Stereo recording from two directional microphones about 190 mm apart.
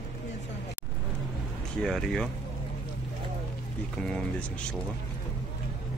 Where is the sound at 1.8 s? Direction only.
Centre (ahead or behind).